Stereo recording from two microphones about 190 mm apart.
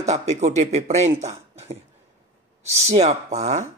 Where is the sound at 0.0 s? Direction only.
35° right (ahead or behind).